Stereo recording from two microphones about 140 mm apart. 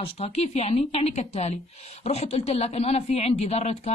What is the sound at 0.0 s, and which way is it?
A woman's voice, 45° left (ahead or behind).